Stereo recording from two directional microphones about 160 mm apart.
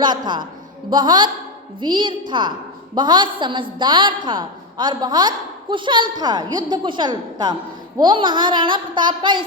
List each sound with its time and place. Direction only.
0.0 s a woman's voice: 30° right (ahead or behind)